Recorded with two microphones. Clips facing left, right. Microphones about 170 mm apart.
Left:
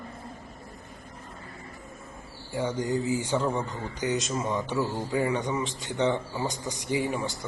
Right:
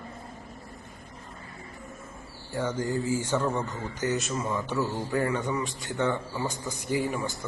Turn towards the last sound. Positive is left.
turn(degrees=20)  # may be behind; listen again after turning